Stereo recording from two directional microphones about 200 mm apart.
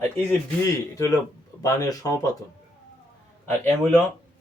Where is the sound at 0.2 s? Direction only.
10° left (ahead or behind).